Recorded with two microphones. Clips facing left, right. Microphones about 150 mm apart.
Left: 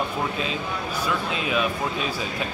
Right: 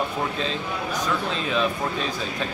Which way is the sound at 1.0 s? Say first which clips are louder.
Left 1 dB; 10° left (ahead or behind).